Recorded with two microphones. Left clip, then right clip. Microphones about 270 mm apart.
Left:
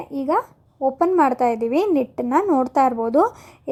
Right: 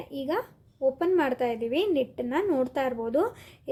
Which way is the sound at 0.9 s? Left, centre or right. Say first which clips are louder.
Left 12 dB; centre.